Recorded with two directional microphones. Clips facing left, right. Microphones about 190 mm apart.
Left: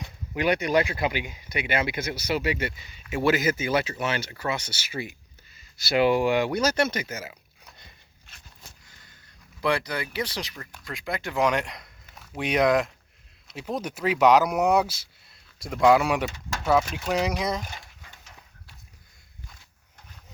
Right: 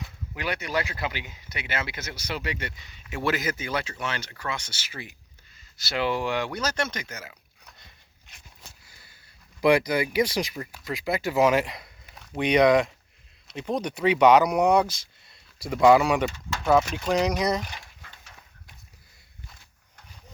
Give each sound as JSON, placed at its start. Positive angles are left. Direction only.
{"t": 0.3, "sound": "speech", "side_deg": 20}
{"t": 8.3, "sound": "a sound", "side_deg": -15}
{"t": 9.6, "sound": "speech", "side_deg": -15}